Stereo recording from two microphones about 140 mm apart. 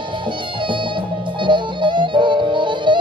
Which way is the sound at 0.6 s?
35° right (ahead or behind).